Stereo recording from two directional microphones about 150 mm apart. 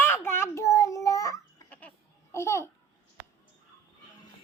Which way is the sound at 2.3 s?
15° left (ahead or behind).